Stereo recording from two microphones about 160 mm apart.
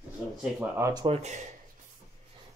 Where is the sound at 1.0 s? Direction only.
45° right (ahead or behind).